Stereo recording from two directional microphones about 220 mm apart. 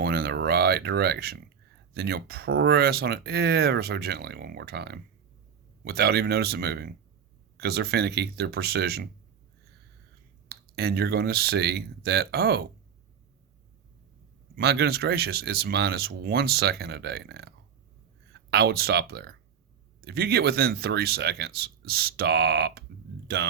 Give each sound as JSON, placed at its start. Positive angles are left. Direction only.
{"t": 0.0, "sound": "a sound", "side_deg": -45}
{"t": 1.9, "sound": "speech", "side_deg": -45}
{"t": 10.5, "sound": "speech", "side_deg": -45}
{"t": 14.5, "sound": "speech", "side_deg": -50}
{"t": 18.5, "sound": "speech", "side_deg": -45}